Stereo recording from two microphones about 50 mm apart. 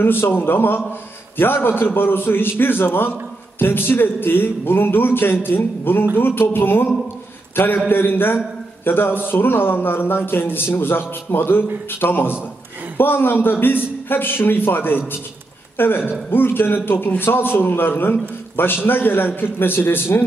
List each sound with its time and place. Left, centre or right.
0.0 s speech: left